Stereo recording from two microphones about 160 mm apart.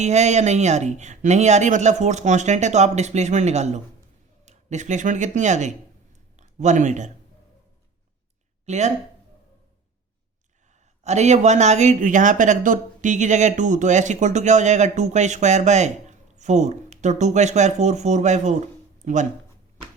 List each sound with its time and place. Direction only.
0.0 s speech: 45° right (ahead or behind)
8.6 s speech: 45° right (ahead or behind)
11.0 s speech: 45° right (ahead or behind)